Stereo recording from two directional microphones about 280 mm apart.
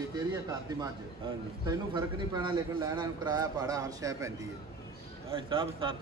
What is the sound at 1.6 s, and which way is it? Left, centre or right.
A man's voice, centre.